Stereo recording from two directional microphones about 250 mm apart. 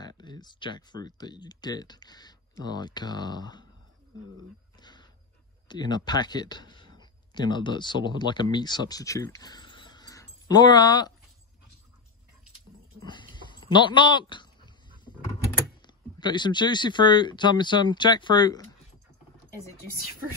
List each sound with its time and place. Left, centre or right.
0.0 s speech: centre
4.7 s dog: centre
5.7 s speech: centre
13.0 s a sound: centre
15.8 s speech: centre